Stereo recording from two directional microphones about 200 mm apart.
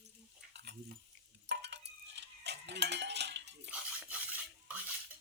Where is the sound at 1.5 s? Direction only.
60° right (ahead or behind).